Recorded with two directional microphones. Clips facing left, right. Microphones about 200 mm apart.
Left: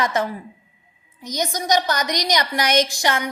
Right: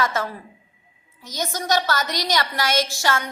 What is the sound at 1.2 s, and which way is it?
A woman's voice, 15° left (ahead or behind).